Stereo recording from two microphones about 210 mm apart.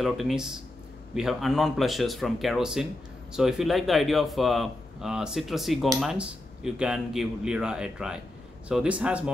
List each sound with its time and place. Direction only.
0.0 s speech: centre (ahead or behind)